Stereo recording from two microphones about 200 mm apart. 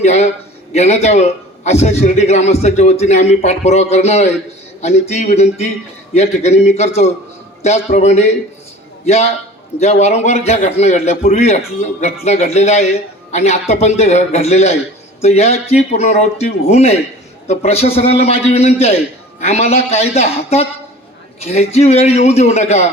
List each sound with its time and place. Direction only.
0.0 s a man's voice: 35° left (ahead or behind)